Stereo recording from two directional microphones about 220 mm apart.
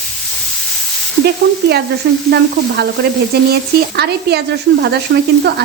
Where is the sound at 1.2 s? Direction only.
45° right (ahead or behind).